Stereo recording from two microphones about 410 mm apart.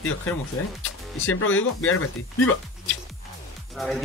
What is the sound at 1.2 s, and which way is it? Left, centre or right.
Speech, left.